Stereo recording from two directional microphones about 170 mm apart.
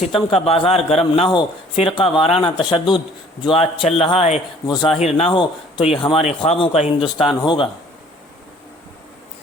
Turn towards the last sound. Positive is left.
turn(degrees=25)  # may be behind; listen again after turning